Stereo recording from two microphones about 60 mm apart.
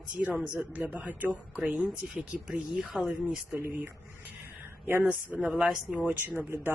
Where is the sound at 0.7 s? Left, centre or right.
Right.